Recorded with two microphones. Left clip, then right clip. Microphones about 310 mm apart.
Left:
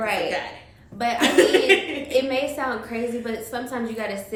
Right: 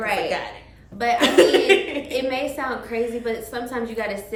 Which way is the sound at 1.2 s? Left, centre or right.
Centre.